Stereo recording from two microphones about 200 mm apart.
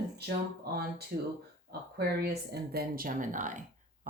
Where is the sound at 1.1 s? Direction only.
50° right (ahead or behind).